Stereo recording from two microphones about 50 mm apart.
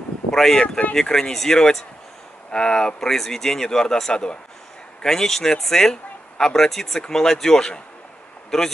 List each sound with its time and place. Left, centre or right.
0.3 s speech: centre